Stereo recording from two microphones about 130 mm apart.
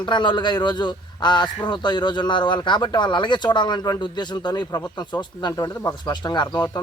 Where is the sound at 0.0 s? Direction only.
35° left (ahead or behind).